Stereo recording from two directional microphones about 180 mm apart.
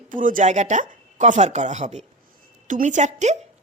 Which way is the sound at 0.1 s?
45° right (ahead or behind).